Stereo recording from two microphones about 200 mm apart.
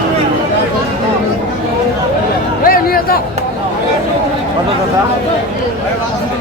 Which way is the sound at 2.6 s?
45° left (ahead or behind).